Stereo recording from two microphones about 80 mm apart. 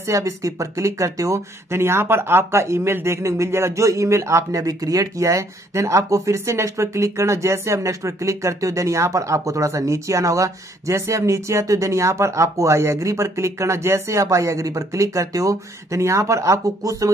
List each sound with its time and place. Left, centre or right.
0.0 s speech: right